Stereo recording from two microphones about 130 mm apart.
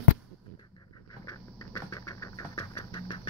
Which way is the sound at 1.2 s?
25° left (ahead or behind).